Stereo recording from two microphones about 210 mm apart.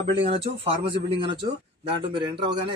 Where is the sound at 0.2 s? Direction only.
30° right (ahead or behind).